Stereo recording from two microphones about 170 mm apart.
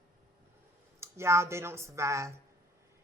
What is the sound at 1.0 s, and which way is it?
Speech, 15° right (ahead or behind).